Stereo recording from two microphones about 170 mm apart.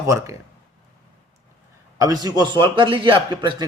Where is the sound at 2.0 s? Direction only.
20° right (ahead or behind).